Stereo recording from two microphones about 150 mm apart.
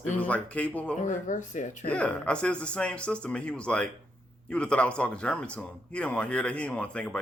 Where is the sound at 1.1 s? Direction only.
60° left (ahead or behind).